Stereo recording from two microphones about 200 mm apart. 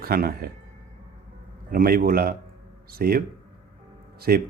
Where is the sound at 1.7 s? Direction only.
45° right (ahead or behind).